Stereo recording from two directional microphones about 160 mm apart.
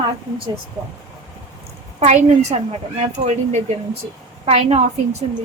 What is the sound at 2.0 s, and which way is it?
A woman's voice, 45° right (ahead or behind).